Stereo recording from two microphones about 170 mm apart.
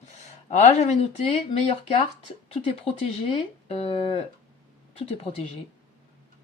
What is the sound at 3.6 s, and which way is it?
Speech, 35° left (ahead or behind).